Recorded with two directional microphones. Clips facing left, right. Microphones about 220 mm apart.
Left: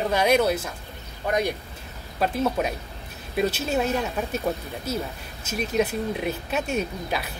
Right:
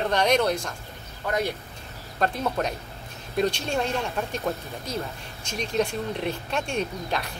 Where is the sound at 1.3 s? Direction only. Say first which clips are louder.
Left 2 dB; 15° left (ahead or behind).